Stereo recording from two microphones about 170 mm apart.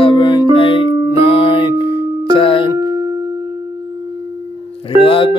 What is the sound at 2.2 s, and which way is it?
Music, 30° left (ahead or behind).